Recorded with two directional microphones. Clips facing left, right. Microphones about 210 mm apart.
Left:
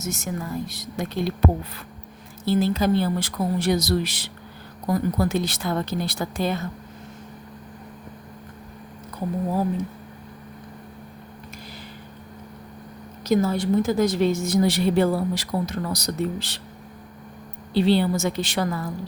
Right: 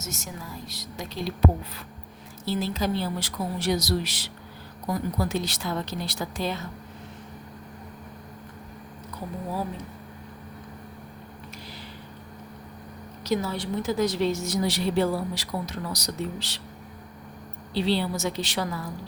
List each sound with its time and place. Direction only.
0.0 s speech: 55° left (ahead or behind)
2.4 s a woman's voice: 55° left (ahead or behind)
13.2 s a woman's voice: 50° left (ahead or behind)
17.7 s a woman's voice: 50° left (ahead or behind)